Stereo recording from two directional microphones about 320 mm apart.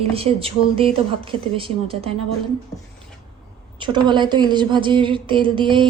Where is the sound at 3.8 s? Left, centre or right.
Centre.